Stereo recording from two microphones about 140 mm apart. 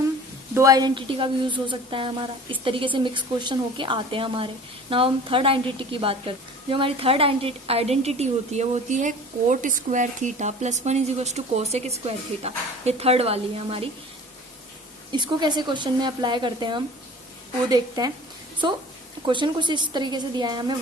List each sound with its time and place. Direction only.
0.5 s a woman's voice: 25° right (ahead or behind); by 13.8 s 45° right (ahead or behind)
15.1 s a woman's voice: 30° right (ahead or behind)
19.2 s a woman's voice: 35° right (ahead or behind)